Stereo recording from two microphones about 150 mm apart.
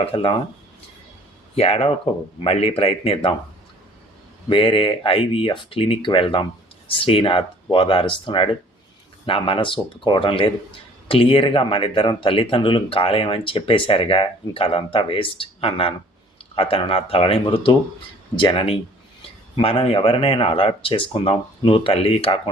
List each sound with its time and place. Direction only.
0.0 s speech: 40° left (ahead or behind)
1.5 s speech: 40° left (ahead or behind)
4.4 s speech: 35° left (ahead or behind)